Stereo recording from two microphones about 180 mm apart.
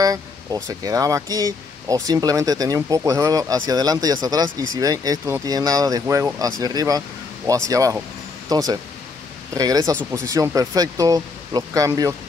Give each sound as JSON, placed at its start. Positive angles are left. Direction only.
{"t": 0.0, "sound": "speech", "side_deg": -20}